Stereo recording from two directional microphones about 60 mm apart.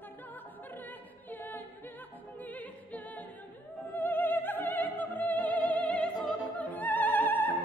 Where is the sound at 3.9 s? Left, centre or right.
Left.